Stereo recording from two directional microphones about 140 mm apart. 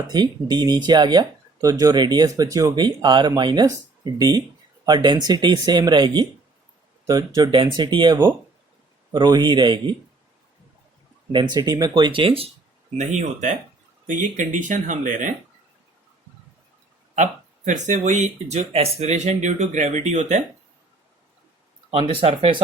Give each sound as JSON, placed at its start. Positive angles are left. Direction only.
{"t": 0.1, "sound": "speech", "side_deg": -30}
{"t": 11.3, "sound": "speech", "side_deg": -30}
{"t": 13.0, "sound": "speech", "side_deg": -60}
{"t": 17.7, "sound": "speech", "side_deg": -60}
{"t": 21.8, "sound": "speech", "side_deg": -40}